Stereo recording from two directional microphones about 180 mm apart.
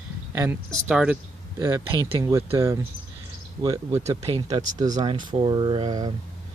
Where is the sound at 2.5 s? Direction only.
15° right (ahead or behind).